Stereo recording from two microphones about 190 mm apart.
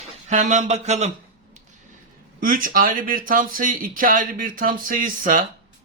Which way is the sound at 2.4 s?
45° right (ahead or behind).